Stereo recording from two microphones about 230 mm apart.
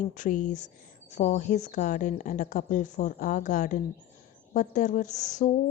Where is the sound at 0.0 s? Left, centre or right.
Left.